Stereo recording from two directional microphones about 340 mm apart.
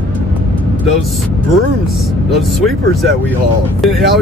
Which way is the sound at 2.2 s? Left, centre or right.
Centre.